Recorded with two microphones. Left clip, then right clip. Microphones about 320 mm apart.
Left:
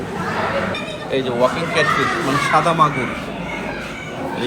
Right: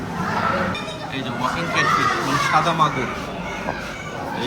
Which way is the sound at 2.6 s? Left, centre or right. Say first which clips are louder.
Left 3 dB; left.